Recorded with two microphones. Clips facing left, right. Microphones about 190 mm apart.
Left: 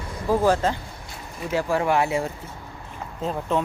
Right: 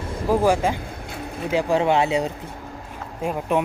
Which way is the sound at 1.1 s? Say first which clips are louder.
Right 8 dB; 60° right (ahead or behind).